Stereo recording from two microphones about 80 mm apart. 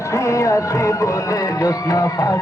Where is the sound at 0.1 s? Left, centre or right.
Left.